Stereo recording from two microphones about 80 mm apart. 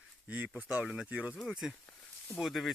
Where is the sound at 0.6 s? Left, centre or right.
Centre.